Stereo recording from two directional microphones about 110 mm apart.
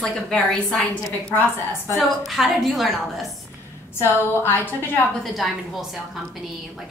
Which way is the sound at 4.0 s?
20° left (ahead or behind).